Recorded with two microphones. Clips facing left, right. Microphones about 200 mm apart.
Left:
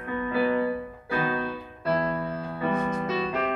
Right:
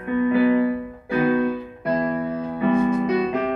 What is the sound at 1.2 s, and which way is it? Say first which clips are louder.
Keyboard: right 11 dB; 20° right (ahead or behind).